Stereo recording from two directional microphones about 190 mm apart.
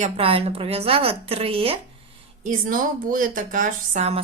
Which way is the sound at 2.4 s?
45° right (ahead or behind).